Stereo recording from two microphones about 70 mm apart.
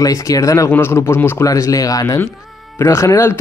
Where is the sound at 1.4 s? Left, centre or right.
Left.